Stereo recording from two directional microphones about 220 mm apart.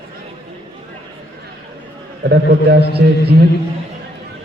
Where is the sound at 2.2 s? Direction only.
50° right (ahead or behind).